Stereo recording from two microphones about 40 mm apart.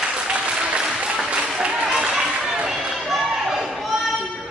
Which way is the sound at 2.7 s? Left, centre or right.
Centre.